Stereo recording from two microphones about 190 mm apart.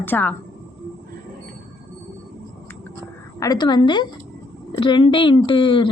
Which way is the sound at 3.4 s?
20° left (ahead or behind).